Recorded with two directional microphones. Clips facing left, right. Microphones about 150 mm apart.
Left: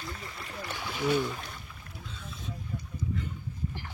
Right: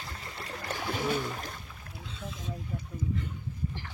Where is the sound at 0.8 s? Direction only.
40° right (ahead or behind).